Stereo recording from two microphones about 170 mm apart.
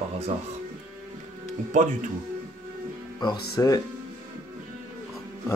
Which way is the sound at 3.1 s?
25° left (ahead or behind).